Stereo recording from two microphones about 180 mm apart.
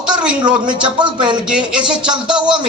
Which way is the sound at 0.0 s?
5° right (ahead or behind).